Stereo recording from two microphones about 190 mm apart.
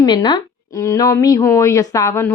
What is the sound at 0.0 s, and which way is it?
A woman's voice, 25° left (ahead or behind).